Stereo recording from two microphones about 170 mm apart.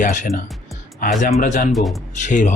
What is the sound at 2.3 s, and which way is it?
Speech, 45° left (ahead or behind).